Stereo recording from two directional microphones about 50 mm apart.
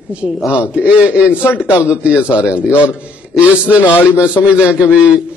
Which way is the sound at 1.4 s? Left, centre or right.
Left.